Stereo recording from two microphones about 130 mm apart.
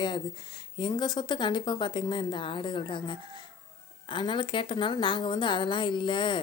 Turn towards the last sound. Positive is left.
turn(degrees=40)  # may be behind; listen again after turning